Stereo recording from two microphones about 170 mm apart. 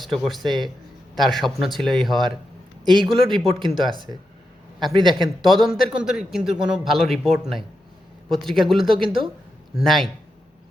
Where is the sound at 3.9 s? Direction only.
30° right (ahead or behind).